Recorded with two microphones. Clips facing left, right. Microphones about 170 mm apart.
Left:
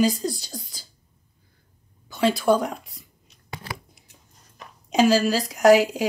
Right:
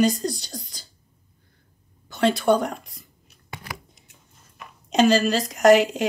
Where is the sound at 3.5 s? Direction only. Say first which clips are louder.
Left 2 dB; 30° left (ahead or behind).